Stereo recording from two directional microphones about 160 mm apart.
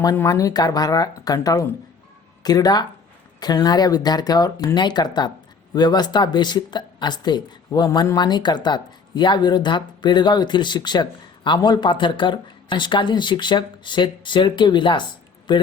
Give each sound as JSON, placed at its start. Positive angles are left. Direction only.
{"t": 0.0, "sound": "a woman's voice", "side_deg": 20}